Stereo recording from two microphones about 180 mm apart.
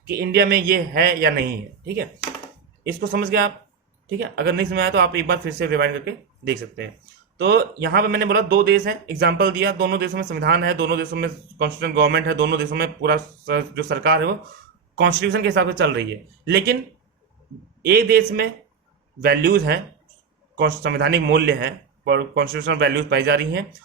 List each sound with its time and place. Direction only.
0.1 s a man's voice: 60° right (ahead or behind)
17.8 s a man's voice: 60° right (ahead or behind)